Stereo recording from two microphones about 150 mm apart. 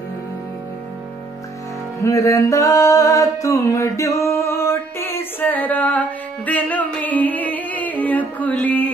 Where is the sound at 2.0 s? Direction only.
20° left (ahead or behind).